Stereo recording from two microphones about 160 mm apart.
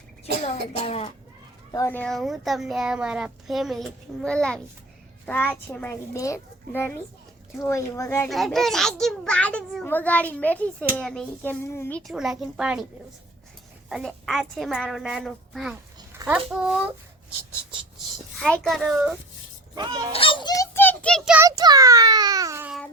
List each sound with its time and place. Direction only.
0.4 s a child's voice: 40° left (ahead or behind)
1.7 s a child's voice: 15° left (ahead or behind)
2.0 s a child's voice: centre (ahead or behind); by 8.3 s 15° left (ahead or behind)
8.3 s a child's voice: centre (ahead or behind)
11.6 s a child's voice: 15° left (ahead or behind)
12.1 s a child's voice: 5° right (ahead or behind)
13.9 s a child's voice: centre (ahead or behind)
17.9 s speech: 5° left (ahead or behind)
19.7 s a child's voice: 25° right (ahead or behind)
20.1 s a child's voice: 35° left (ahead or behind); by 21.3 s centre (ahead or behind)
21.3 s a child's voice: 20° right (ahead or behind)